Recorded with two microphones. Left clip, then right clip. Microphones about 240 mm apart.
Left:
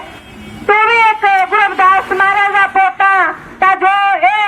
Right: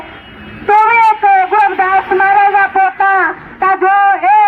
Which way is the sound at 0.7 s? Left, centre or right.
Left.